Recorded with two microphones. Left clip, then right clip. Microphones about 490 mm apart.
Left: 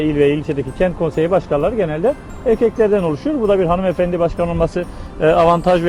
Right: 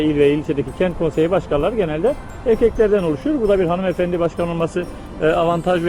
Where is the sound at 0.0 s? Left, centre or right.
Left.